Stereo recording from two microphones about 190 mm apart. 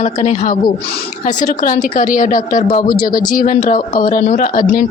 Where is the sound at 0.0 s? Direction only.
40° left (ahead or behind).